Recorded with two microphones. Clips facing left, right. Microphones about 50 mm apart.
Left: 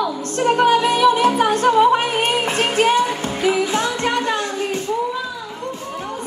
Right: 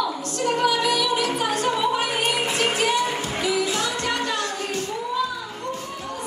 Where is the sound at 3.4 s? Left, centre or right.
Left.